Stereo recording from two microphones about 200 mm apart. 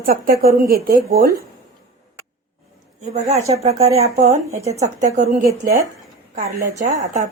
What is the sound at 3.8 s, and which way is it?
A woman's voice, 35° right (ahead or behind).